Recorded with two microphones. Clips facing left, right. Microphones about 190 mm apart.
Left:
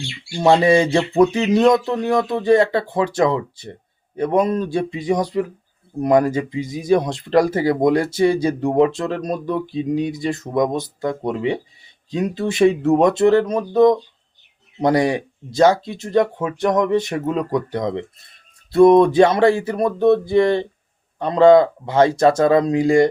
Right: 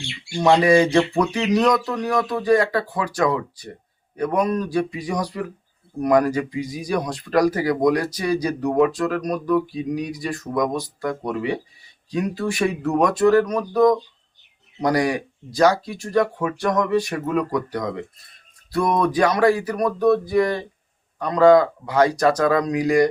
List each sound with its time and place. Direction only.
0.3 s speech: 25° left (ahead or behind)